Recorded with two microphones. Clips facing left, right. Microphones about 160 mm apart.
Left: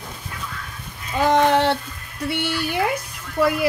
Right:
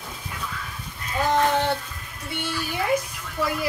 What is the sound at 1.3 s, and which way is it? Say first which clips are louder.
Speech: left 4 dB; 75° left (ahead or behind).